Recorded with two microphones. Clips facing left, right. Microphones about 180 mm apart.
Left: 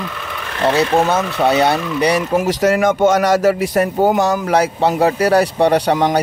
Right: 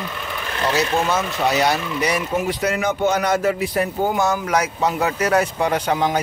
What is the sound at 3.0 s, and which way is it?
Speech, 90° left.